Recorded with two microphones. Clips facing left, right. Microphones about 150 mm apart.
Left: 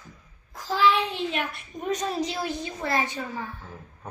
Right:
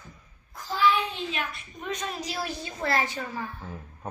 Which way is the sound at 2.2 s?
25° left (ahead or behind).